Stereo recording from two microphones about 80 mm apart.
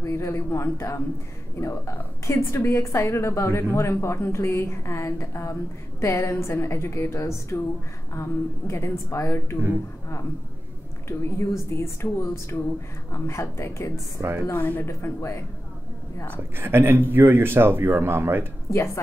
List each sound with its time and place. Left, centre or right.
0.0 s a woman's voice: left
11.1 s a woman's voice: left
14.4 s a woman's voice: left
16.5 s speech: right